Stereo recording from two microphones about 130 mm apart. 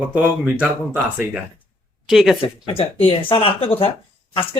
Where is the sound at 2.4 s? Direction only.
45° left (ahead or behind).